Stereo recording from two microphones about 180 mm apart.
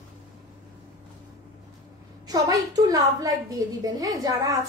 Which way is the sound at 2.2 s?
20° right (ahead or behind).